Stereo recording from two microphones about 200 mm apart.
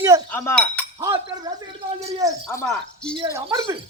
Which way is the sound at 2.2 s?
15° right (ahead or behind).